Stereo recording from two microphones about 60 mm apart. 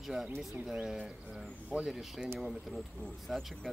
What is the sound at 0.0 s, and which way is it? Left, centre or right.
Speech, centre.